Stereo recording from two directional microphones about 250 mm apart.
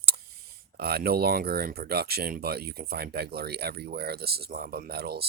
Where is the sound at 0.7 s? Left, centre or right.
Right.